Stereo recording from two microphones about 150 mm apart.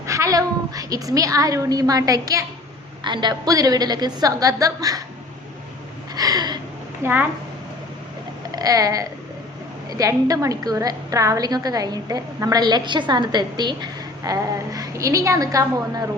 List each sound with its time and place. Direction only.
0.0 s a woman's voice: 20° right (ahead or behind)
6.1 s a sound: 25° right (ahead or behind)
7.0 s a woman's voice: 10° right (ahead or behind)
8.5 s a woman's voice: 25° right (ahead or behind)